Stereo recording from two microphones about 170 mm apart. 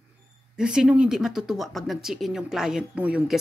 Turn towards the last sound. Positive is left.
turn(degrees=-5)  # may be behind; listen again after turning